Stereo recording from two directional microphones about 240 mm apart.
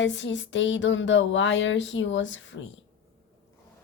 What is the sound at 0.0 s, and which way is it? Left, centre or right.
A woman's voice, left.